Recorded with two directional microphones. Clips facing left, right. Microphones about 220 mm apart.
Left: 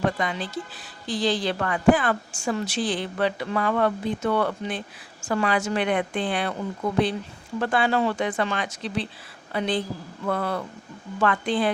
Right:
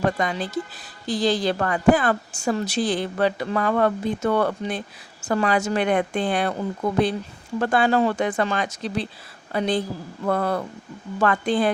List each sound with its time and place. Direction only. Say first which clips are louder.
0.0 s a woman's voice: right 2 dB; 45° right (ahead or behind)
7.6 s speech: right 3 dB; 45° right (ahead or behind)